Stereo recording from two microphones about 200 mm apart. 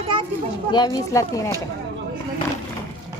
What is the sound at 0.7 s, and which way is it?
Speech, 20° left (ahead or behind).